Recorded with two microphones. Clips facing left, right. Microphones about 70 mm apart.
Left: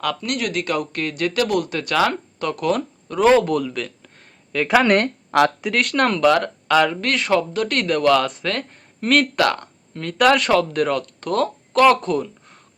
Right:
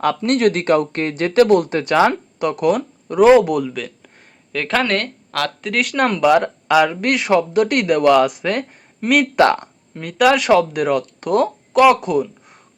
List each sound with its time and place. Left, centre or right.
0.0 s speech: right; by 4.1 s centre
4.5 s speech: centre
5.7 s speech: centre
9.4 s speech: right